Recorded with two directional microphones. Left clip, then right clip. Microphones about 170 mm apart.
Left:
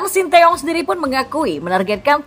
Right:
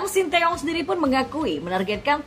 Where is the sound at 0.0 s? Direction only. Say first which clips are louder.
Left 9 dB; 30° left (ahead or behind).